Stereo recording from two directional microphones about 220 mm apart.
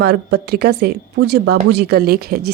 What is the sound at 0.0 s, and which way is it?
Speech, 50° right (ahead or behind).